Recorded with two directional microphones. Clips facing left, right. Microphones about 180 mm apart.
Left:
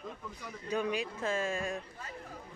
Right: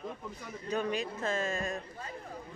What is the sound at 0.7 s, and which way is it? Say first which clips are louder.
Speech: even; 10° left (ahead or behind).